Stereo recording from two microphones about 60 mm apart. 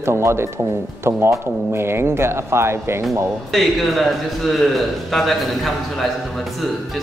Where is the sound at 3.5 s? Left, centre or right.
Centre.